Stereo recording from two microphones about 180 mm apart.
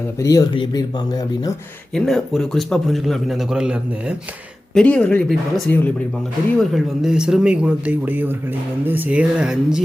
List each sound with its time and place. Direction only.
0.2 s speech: 20° left (ahead or behind)
1.9 s a man's voice: 5° left (ahead or behind)
6.6 s a man's voice: centre (ahead or behind)